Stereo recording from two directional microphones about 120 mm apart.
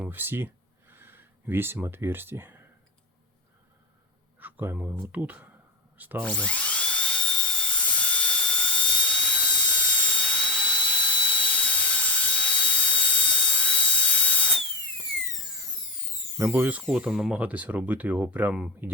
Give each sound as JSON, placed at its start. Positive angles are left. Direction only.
{"t": 0.0, "sound": "speech", "side_deg": -15}
{"t": 4.4, "sound": "speech", "side_deg": -15}
{"t": 6.2, "sound": "dental drill", "side_deg": 10}
{"t": 16.4, "sound": "speech", "side_deg": -15}